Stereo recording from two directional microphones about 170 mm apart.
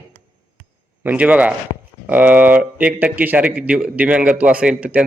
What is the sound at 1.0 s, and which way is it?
A man's voice, 10° right (ahead or behind).